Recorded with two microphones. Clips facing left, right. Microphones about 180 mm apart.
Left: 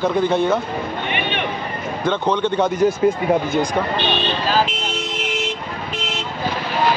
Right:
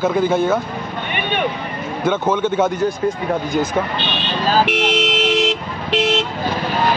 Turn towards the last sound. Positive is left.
turn(degrees=-85)